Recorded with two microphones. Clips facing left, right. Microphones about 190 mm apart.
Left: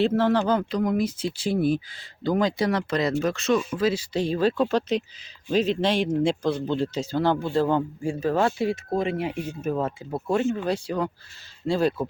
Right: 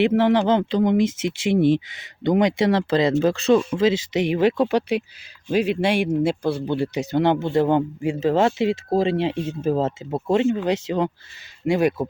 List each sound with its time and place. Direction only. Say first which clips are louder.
0.0 s speech: right 4 dB; 15° right (ahead or behind)
0.9 s speech: right 5 dB; 90° right
1.5 s speech: right 7 dB; 25° right (ahead or behind)
8.9 s speech: right 5 dB; 30° right (ahead or behind); by 12.0 s 15° right (ahead or behind)